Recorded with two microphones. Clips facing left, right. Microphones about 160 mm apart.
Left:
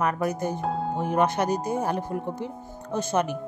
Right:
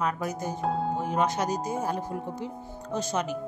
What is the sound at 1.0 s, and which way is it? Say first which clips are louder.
A woman's voice: left 7 dB; 60° left (ahead or behind).